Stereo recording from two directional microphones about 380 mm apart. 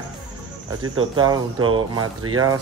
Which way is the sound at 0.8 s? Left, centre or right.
Right.